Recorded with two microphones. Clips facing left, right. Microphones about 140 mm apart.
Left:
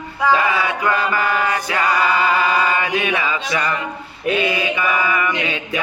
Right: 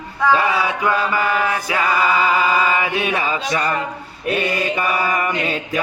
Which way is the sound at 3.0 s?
40° right (ahead or behind).